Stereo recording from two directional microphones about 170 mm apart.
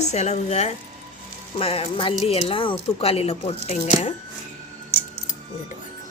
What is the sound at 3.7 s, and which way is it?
Speech, 50° left (ahead or behind).